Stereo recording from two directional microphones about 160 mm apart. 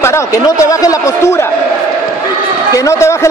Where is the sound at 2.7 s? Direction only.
20° left (ahead or behind).